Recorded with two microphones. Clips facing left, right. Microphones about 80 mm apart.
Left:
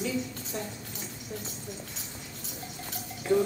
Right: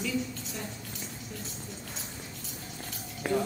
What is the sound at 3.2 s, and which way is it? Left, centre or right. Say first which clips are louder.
Music: left 4 dB; right.